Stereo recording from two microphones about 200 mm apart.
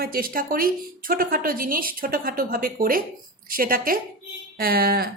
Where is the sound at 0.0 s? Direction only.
45° right (ahead or behind).